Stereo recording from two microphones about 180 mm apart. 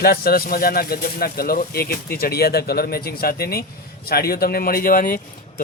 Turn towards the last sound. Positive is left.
turn(degrees=50)  # may be behind; listen again after turning